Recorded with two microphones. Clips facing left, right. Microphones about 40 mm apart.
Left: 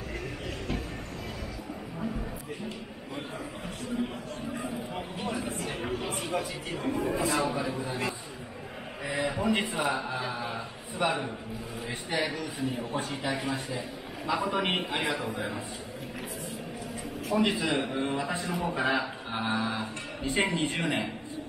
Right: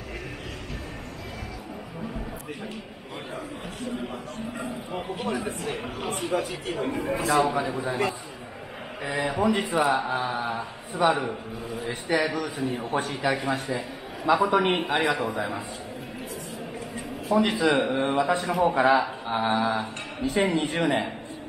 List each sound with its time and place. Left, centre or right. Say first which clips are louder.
5.2 s a man's voice: right 3 dB; right
7.2 s a man's voice: right 5 dB; right
12.1 s a man's voice: right 6 dB; right
14.8 s a man's voice: right 6 dB; right
17.4 s a man's voice: right 5 dB; right